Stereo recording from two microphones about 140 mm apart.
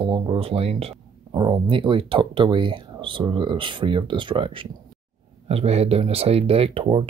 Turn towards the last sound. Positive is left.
turn(degrees=-40)  # may be behind; listen again after turning